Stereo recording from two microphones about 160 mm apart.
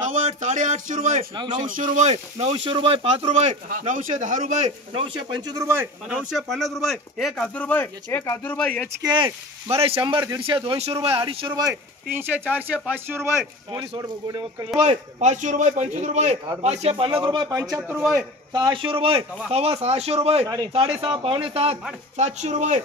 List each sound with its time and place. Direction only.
0.0 s speech: 45° right (ahead or behind)
2.5 s speech: 30° right (ahead or behind)
3.6 s speech: 55° right (ahead or behind); by 5.6 s 30° right (ahead or behind)
5.6 s a man's voice: 15° right (ahead or behind); by 8.8 s 5° left (ahead or behind)
9.0 s speech: 30° right (ahead or behind)
10.0 s speech: 25° right (ahead or behind)
11.7 s speech: 10° right (ahead or behind)
13.7 s speech: 25° right (ahead or behind)
14.8 s speech: 45° right (ahead or behind); by 18.0 s 15° right (ahead or behind)
18.5 s speech: 30° right (ahead or behind)
20.4 s speech: 25° right (ahead or behind)
20.7 s speech: 35° right (ahead or behind)